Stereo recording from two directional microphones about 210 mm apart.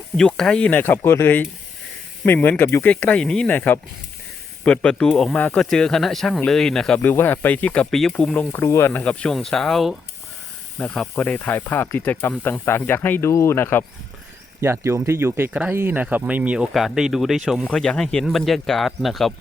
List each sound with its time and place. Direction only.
0.2 s speech: 5° left (ahead or behind)
14.6 s speech: 10° right (ahead or behind)